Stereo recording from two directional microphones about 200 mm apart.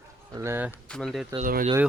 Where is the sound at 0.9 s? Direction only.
5° left (ahead or behind).